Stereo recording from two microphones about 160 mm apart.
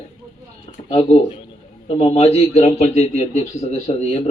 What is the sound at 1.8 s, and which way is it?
A man's voice, 40° left (ahead or behind).